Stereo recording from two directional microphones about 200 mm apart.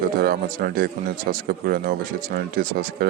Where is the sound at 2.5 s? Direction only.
45° right (ahead or behind).